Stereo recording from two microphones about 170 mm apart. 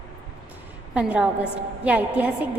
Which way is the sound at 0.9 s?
5° right (ahead or behind).